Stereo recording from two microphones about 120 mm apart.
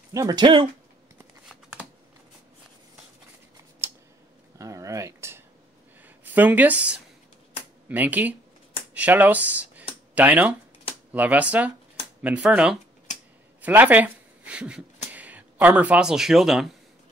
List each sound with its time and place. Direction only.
0.1 s speech: 30° right (ahead or behind)
1.5 s shuffling cards: 5° right (ahead or behind)
3.8 s a sound: 20° right (ahead or behind)
6.0 s speech: 15° right (ahead or behind)